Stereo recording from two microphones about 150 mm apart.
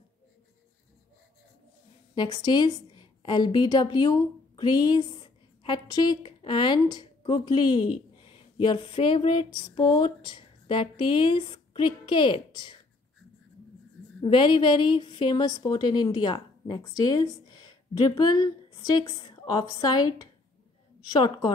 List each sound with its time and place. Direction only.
2.1 s a woman's voice: 25° left (ahead or behind)
14.2 s a woman's voice: 30° left (ahead or behind)